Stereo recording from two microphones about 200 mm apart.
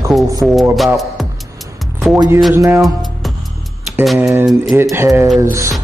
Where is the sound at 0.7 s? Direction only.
Centre (ahead or behind).